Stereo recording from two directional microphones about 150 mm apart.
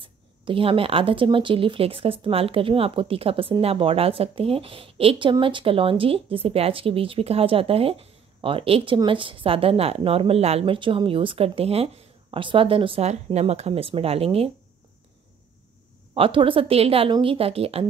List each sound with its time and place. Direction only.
0.0 s speech: 35° right (ahead or behind)
16.2 s speech: 35° right (ahead or behind)